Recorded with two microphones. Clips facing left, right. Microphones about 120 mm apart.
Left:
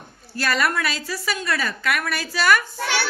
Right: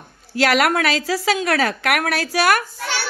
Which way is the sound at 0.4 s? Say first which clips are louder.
Right 6 dB; 85° right.